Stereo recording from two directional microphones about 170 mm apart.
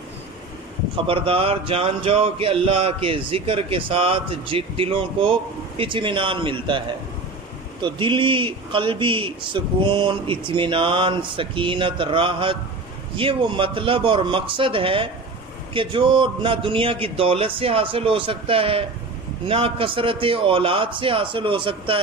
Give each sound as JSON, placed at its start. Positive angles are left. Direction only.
{"t": 1.0, "sound": "speech", "side_deg": -35}
{"t": 7.8, "sound": "a man's voice", "side_deg": -30}